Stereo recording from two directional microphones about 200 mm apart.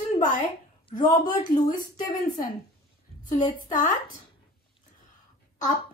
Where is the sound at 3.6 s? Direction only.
40° left (ahead or behind).